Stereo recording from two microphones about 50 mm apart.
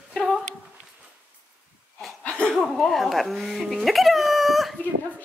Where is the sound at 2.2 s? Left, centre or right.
Left.